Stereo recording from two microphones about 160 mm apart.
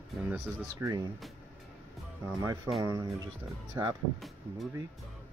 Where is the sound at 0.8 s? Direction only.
20° right (ahead or behind).